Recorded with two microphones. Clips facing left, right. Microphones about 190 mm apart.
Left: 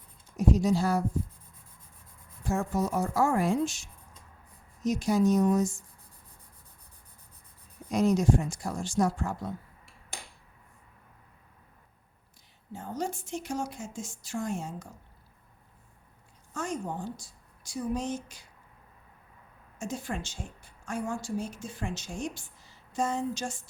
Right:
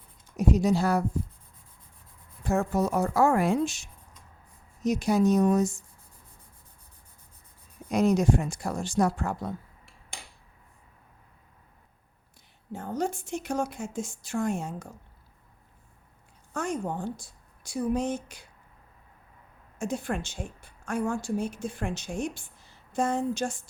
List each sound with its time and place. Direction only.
0.3 s a woman's voice: 65° right (ahead or behind)
2.4 s a woman's voice: 65° right (ahead or behind)
7.9 s a woman's voice: 60° right (ahead or behind)
12.7 s a woman's voice: 55° right (ahead or behind)
16.6 s a woman's voice: 60° right (ahead or behind)
19.8 s a woman's voice: 60° right (ahead or behind)